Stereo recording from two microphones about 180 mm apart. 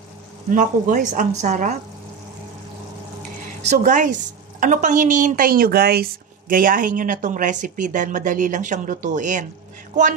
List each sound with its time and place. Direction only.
0.5 s speech: 50° right (ahead or behind)
3.6 s speech: 45° right (ahead or behind); by 6.0 s 60° right (ahead or behind)
6.5 s speech: 50° right (ahead or behind)